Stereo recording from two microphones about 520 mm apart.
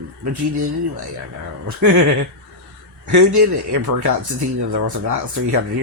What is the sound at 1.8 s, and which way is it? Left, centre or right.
Speech, right.